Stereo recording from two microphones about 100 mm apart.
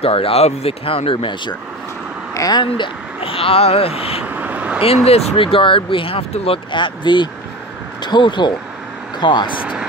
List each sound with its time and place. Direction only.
0.0 s speech: 75° left (ahead or behind); by 1.5 s 55° left (ahead or behind)
2.3 s speech: 35° left (ahead or behind)
2.6 s speech: 60° left (ahead or behind)
4.3 s vehicle: 15° right (ahead or behind)
5.0 s speech: 85° left; by 9.6 s 50° left (ahead or behind)